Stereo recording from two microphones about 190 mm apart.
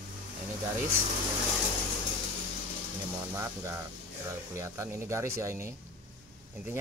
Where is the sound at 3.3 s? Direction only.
15° right (ahead or behind).